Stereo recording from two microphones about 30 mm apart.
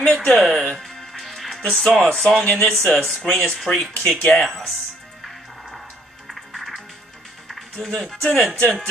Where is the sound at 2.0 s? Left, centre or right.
Centre.